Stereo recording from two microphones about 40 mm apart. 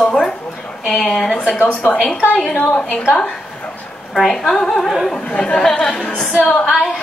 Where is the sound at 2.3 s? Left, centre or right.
Centre.